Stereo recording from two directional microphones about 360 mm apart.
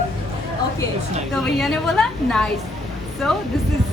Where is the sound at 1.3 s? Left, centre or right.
Centre.